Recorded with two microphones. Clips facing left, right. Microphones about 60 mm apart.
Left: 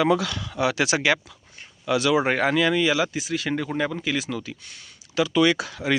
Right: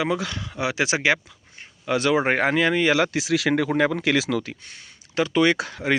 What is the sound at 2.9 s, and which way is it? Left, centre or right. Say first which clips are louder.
Speech: right 3 dB; right.